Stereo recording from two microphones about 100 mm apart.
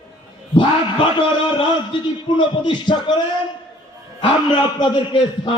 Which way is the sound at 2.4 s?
50° left (ahead or behind).